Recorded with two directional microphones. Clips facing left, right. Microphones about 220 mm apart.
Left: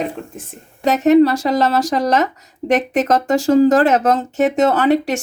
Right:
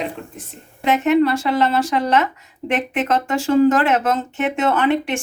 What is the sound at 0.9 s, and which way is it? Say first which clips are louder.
A woman's voice: left 4 dB; 40° left (ahead or behind).